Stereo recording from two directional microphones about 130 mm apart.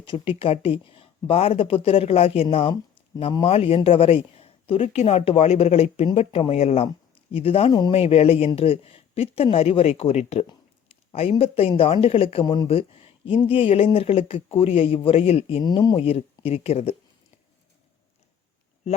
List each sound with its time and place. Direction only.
0.0 s a woman's voice: 40° left (ahead or behind)
7.7 s speech: 35° left (ahead or behind)
7.9 s a woman's voice: 50° left (ahead or behind)
15.6 s speech: 30° left (ahead or behind)
16.0 s a woman's voice: 50° left (ahead or behind)